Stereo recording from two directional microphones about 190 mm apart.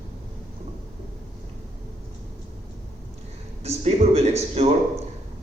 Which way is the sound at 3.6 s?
35° right (ahead or behind).